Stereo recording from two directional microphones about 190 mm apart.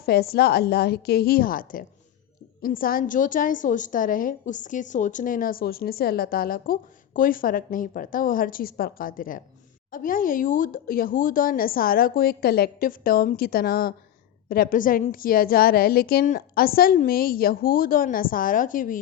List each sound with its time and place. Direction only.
0.0 s a woman's voice: 55° left (ahead or behind)